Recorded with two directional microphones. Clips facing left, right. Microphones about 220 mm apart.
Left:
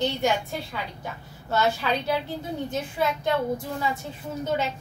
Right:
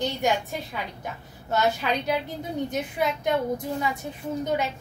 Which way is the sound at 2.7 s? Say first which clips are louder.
Left 2 dB; 15° right (ahead or behind).